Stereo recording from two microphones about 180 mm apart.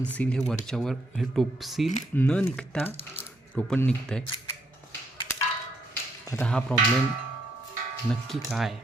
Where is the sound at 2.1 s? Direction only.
10° left (ahead or behind).